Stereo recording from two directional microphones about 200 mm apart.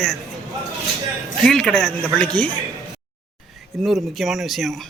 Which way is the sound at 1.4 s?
5° left (ahead or behind).